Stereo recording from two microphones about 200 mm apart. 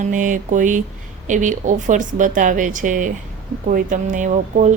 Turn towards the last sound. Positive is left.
turn(degrees=-40)  # may be behind; listen again after turning